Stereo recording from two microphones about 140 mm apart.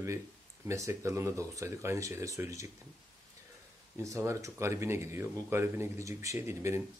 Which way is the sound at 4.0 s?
20° right (ahead or behind).